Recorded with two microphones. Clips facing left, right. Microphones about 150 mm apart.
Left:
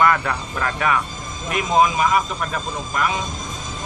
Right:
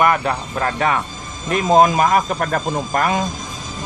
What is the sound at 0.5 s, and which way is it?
Speech, 35° right (ahead or behind).